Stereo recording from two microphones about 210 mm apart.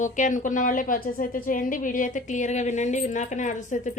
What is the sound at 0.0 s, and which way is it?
A woman's voice, 35° left (ahead or behind).